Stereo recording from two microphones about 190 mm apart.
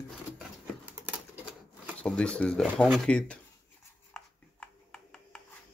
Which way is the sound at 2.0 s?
5° left (ahead or behind).